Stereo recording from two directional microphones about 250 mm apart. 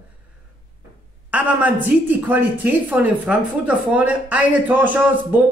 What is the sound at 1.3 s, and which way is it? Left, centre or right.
A woman's voice, centre.